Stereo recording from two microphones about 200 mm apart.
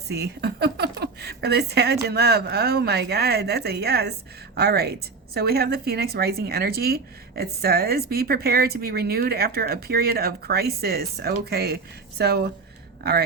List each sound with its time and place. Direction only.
0.1 s a woman's voice: 55° right (ahead or behind)